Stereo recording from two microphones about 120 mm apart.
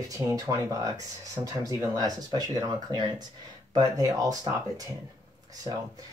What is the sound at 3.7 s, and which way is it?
Speech, 30° right (ahead or behind).